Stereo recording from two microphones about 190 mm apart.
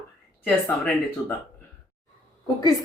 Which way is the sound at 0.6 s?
10° left (ahead or behind).